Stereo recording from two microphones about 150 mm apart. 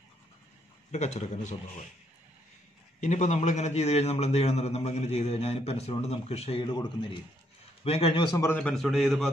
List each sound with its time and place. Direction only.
0.9 s a man's voice: 50° left (ahead or behind)
3.0 s a man's voice: 50° left (ahead or behind)
8.4 s a man's voice: 15° left (ahead or behind)
8.6 s a man's voice: centre (ahead or behind)